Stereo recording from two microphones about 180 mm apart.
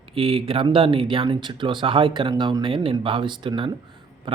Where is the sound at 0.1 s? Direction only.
30° right (ahead or behind).